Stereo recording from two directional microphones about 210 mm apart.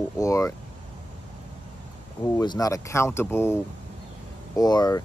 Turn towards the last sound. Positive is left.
turn(degrees=20)  # may be behind; listen again after turning